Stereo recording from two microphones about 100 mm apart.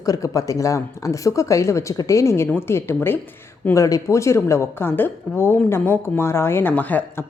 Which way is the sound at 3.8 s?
35° left (ahead or behind).